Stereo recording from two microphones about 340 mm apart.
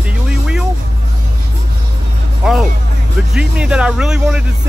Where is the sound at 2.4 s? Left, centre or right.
Centre.